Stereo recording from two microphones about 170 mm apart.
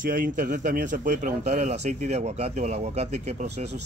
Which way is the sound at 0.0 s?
50° right (ahead or behind).